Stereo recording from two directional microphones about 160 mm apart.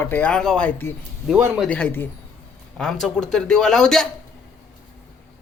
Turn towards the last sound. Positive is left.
turn(degrees=5)  # may be behind; listen again after turning